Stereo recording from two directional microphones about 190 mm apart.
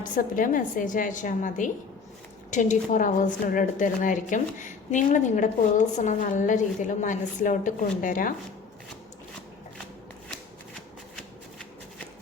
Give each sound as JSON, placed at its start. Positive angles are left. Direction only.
{"t": 0.0, "sound": "a woman's voice", "side_deg": 45}